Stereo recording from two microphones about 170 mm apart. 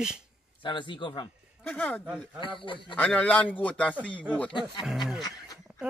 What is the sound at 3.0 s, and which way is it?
Speech, 10° left (ahead or behind).